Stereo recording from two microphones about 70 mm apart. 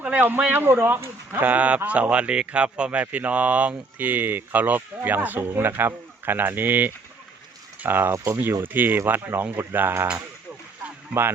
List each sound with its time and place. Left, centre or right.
0.0 s speech: right